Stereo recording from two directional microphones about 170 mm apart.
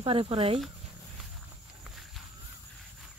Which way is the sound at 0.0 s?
30° right (ahead or behind).